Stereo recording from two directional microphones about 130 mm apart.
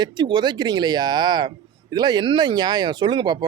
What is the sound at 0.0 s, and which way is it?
Speech, 35° right (ahead or behind).